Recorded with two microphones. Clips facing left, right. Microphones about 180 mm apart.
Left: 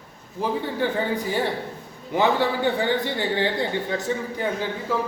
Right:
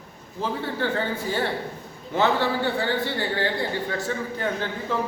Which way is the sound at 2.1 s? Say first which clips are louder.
Left 1 dB; 15° left (ahead or behind).